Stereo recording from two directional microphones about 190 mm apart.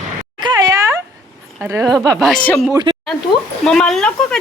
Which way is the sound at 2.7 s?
25° right (ahead or behind).